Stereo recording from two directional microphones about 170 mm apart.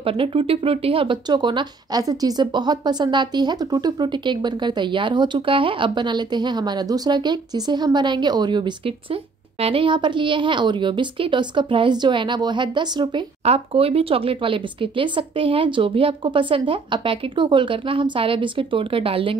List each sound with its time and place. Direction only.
0.0 s speech: 35° right (ahead or behind)